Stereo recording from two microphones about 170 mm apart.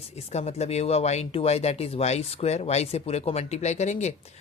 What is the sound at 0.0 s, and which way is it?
Speech, 40° left (ahead or behind).